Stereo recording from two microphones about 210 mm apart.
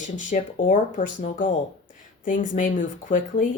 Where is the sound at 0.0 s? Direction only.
35° left (ahead or behind).